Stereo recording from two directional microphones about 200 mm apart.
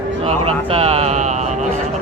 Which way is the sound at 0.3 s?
30° right (ahead or behind).